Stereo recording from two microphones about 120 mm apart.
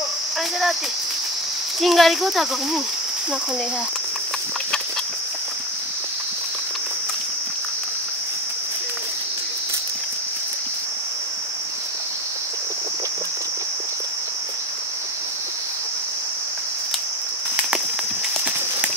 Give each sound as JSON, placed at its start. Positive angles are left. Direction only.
{"t": 1.8, "sound": "speech", "side_deg": 0}